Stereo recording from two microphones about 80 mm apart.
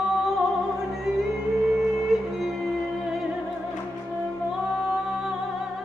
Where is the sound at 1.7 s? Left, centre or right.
Centre.